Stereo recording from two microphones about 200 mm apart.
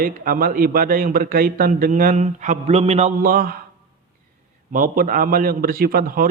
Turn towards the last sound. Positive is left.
turn(degrees=-45)  # may be behind; listen again after turning